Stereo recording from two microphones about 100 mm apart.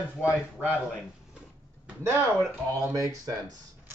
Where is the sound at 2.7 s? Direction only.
40° right (ahead or behind).